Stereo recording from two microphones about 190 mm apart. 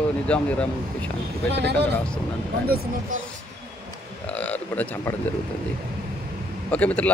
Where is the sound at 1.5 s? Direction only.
60° right (ahead or behind).